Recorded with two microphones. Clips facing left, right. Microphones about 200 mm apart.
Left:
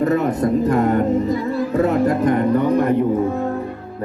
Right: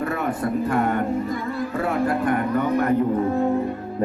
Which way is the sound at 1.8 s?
20° left (ahead or behind).